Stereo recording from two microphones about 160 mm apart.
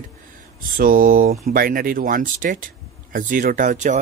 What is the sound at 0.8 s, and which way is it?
Speech, 60° right (ahead or behind).